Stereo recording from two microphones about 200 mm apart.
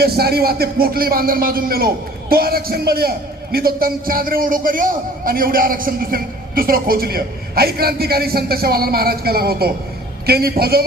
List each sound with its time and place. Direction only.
0.0 s a man's voice: 50° right (ahead or behind)